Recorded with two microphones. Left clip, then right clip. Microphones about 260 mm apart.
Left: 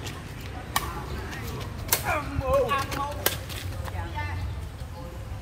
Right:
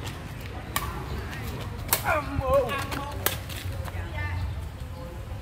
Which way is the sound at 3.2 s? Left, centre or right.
Centre.